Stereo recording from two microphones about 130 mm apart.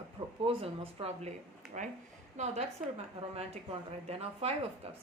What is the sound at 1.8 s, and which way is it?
Speech, 75° right (ahead or behind).